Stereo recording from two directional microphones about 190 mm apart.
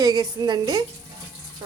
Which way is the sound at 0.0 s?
20° right (ahead or behind).